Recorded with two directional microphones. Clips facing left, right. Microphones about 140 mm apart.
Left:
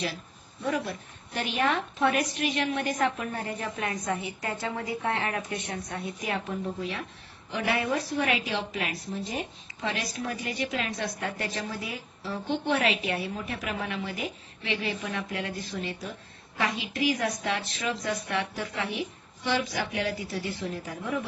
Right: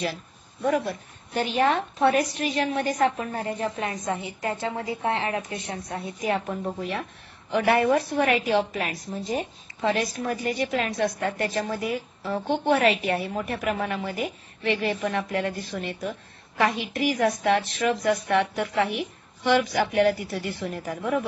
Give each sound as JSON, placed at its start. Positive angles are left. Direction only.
{"t": 0.7, "sound": "a woman's voice", "side_deg": -40}
{"t": 6.8, "sound": "a woman's voice", "side_deg": -55}